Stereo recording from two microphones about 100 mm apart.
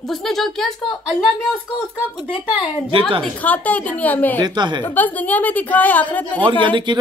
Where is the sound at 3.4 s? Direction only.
15° left (ahead or behind).